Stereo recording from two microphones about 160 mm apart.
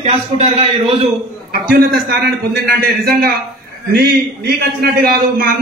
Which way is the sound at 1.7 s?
80° right.